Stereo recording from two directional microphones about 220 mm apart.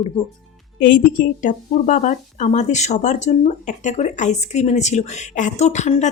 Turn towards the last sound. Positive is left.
turn(degrees=30)  # may be behind; listen again after turning